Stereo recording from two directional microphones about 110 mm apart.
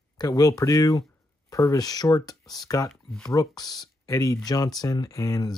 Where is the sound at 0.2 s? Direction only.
30° left (ahead or behind).